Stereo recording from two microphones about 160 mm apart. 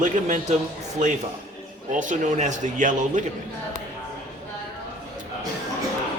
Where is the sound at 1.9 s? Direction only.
50° right (ahead or behind).